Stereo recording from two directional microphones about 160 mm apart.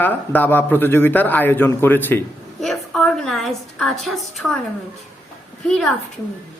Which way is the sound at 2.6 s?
Centre (ahead or behind).